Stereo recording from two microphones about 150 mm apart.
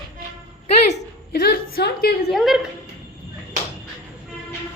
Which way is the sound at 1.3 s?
90° left.